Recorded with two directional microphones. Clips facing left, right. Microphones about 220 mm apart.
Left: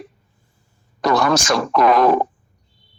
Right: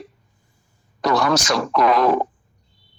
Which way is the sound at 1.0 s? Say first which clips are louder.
Left 2 dB; 50° left (ahead or behind).